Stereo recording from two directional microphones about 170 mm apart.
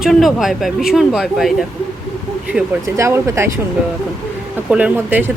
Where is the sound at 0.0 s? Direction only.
Centre (ahead or behind).